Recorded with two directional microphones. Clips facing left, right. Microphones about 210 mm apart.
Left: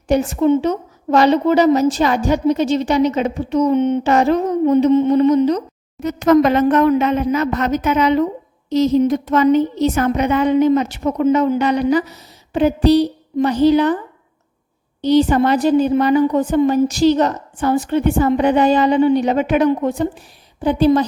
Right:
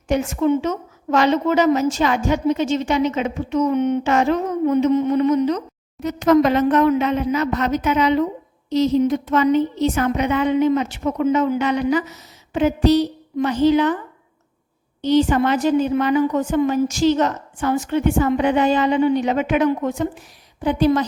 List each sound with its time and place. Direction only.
0.1 s a woman's voice: 35° left (ahead or behind)
6.0 s a woman's voice: 50° left (ahead or behind)
15.0 s a woman's voice: 35° left (ahead or behind)